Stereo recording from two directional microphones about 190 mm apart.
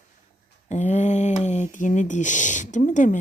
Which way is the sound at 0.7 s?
40° left (ahead or behind).